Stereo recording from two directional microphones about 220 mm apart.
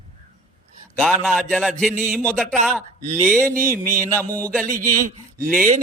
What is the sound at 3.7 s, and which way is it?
Speech, 10° right (ahead or behind).